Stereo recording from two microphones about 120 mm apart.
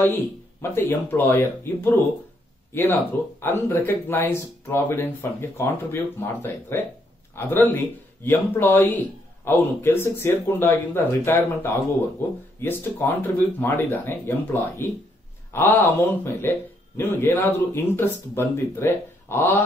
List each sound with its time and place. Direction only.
0.0 s speech: 15° left (ahead or behind)